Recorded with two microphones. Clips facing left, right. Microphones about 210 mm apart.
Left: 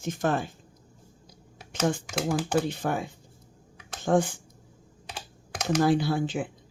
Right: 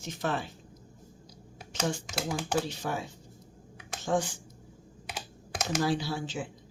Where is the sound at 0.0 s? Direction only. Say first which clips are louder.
Left 5 dB; 50° left (ahead or behind).